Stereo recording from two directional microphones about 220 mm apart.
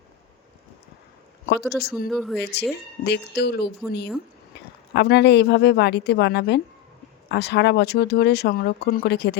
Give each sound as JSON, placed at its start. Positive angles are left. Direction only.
{"t": 1.5, "sound": "speech", "side_deg": 45}
{"t": 2.0, "sound": "speech", "side_deg": 0}
{"t": 3.0, "sound": "speech", "side_deg": 50}